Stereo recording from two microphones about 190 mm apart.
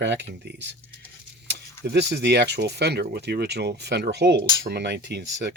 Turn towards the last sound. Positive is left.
turn(degrees=-60)  # may be behind; listen again after turning